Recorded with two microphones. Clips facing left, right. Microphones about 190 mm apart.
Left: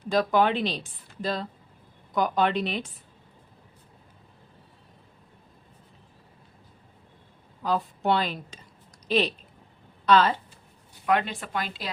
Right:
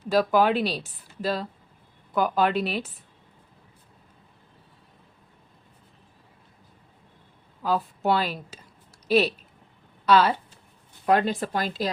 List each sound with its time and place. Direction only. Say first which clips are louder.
0.1 s speech: right 2 dB; 5° right (ahead or behind)
7.6 s speech: right 1 dB; 5° right (ahead or behind)
11.0 s speech: right 4 dB; 35° right (ahead or behind)